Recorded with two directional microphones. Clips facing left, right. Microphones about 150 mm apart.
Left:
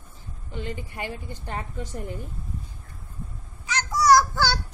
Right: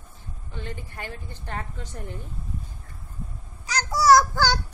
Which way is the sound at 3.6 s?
35° right (ahead or behind).